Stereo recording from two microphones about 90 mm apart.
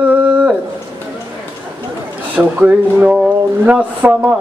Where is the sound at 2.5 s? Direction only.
15° right (ahead or behind).